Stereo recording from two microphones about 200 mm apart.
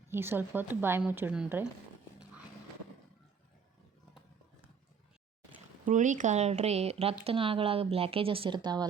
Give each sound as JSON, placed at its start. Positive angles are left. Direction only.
{"t": 0.1, "sound": "speech", "side_deg": -10}
{"t": 5.8, "sound": "speech", "side_deg": -40}